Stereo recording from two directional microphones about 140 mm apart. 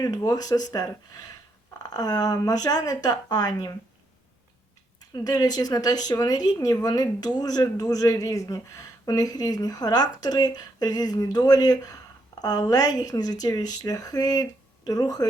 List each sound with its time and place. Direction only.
0.0 s speech: 25° left (ahead or behind)
4.9 s speech: 30° left (ahead or behind)